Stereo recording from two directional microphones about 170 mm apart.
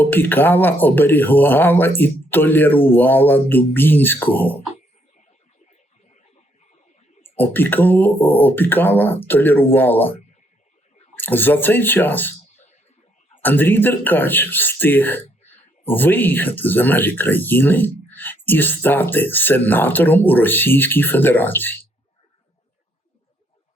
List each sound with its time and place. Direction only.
0.0 s speech: 10° left (ahead or behind)
7.3 s speech: 10° left (ahead or behind)
11.2 s speech: 10° left (ahead or behind)
13.4 s speech: 10° left (ahead or behind)